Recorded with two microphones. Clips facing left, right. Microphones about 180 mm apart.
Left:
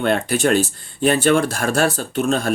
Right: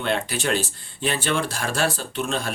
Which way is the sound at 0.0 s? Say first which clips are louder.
Left 7 dB; 50° left (ahead or behind).